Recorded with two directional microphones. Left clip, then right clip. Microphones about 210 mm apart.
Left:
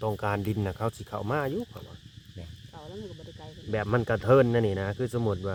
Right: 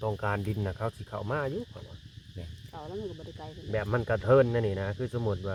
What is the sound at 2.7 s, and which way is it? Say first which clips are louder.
Speech: right 4 dB; 20° right (ahead or behind).